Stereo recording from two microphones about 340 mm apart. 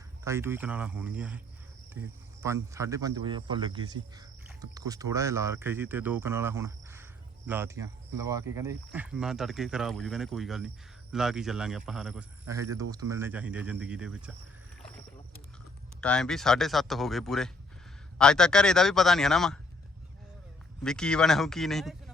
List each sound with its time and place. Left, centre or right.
0.3 s speech: centre
2.7 s speech: centre
16.0 s speech: centre
20.8 s speech: centre